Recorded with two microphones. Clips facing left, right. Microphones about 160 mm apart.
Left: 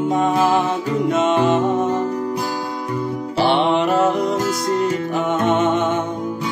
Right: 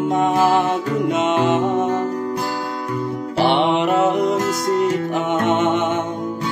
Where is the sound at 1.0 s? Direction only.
20° right (ahead or behind).